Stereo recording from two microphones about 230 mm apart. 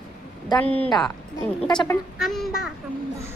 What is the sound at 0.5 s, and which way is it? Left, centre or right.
Speech, centre.